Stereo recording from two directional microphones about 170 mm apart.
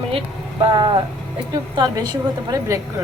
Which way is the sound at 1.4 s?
25° right (ahead or behind).